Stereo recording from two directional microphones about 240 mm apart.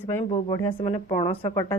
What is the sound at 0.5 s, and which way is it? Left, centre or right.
A woman's voice, centre.